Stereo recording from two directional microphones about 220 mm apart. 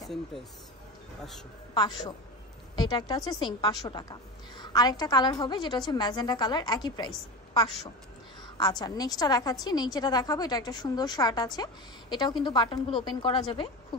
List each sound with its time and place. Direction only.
0.0 s speech: centre (ahead or behind)
1.7 s a woman's voice: 20° left (ahead or behind)
8.5 s a woman's voice: 20° left (ahead or behind)